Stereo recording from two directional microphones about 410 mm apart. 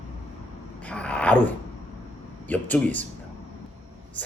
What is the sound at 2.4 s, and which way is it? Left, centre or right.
Speech, centre.